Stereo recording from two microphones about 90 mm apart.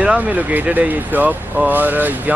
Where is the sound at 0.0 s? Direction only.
15° right (ahead or behind).